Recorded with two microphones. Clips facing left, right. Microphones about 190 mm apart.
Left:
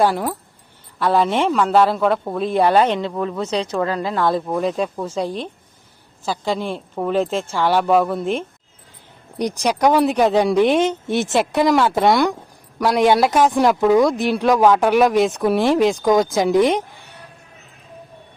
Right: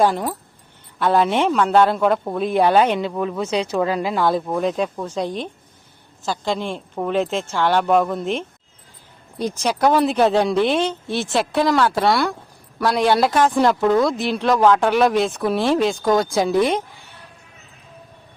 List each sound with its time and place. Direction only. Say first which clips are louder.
0.0 s speech: even; 5° left (ahead or behind)
9.4 s speech: left 2 dB; 15° left (ahead or behind)